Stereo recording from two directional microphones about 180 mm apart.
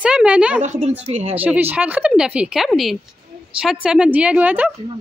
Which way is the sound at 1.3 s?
10° right (ahead or behind).